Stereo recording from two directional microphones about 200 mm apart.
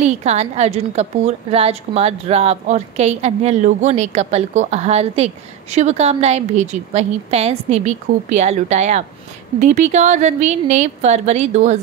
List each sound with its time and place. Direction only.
0.0 s a woman's voice: 35° right (ahead or behind)